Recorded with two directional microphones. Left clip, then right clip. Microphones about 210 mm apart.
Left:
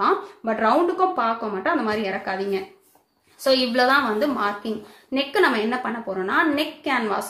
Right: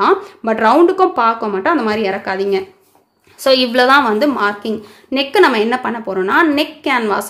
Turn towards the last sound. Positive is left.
turn(degrees=-50)  # may be behind; listen again after turning